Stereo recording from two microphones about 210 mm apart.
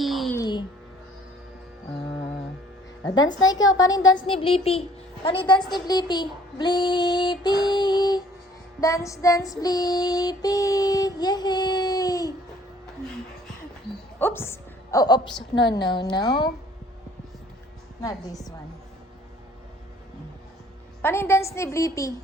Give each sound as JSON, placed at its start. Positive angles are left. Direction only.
{"t": 0.0, "sound": "music", "side_deg": 0}
{"t": 0.3, "sound": "music", "side_deg": 20}
{"t": 3.3, "sound": "female singing", "side_deg": 20}
{"t": 3.7, "sound": "a woman's voice", "side_deg": 15}
{"t": 8.8, "sound": "female singing", "side_deg": 15}
{"t": 14.2, "sound": "a woman's voice", "side_deg": 10}
{"t": 21.0, "sound": "female singing", "side_deg": 10}